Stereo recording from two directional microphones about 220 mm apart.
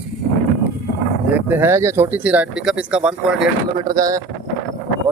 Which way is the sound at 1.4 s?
10° right (ahead or behind).